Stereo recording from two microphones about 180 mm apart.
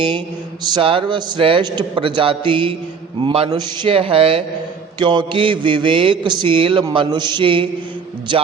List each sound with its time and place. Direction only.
0.6 s mantra: 25° right (ahead or behind)
3.2 s a man's voice: 30° right (ahead or behind)
4.9 s mantra: 25° right (ahead or behind)